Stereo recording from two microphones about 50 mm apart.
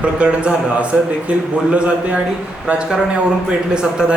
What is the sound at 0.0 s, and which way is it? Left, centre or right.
A man's voice, right.